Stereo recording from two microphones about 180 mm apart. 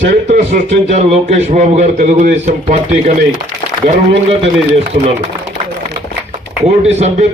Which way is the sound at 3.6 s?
35° left (ahead or behind).